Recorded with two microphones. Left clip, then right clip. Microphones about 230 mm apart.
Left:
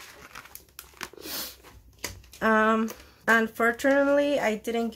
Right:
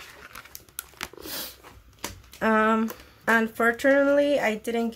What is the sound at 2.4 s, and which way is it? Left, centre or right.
Speech, centre.